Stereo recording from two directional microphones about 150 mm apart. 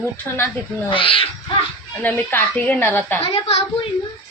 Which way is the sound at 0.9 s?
35° left (ahead or behind).